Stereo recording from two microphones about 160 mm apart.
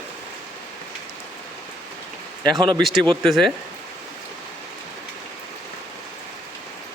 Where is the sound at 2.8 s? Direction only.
Centre (ahead or behind).